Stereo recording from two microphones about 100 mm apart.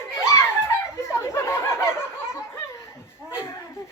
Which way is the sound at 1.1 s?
25° left (ahead or behind).